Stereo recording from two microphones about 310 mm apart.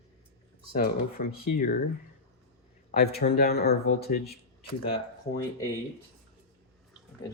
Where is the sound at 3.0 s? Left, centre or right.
Left.